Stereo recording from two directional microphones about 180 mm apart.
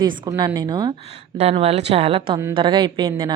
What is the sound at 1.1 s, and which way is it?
A woman's voice, 35° right (ahead or behind).